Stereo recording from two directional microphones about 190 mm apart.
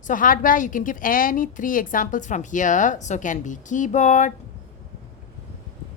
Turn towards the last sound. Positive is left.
turn(degrees=40)  # may be behind; listen again after turning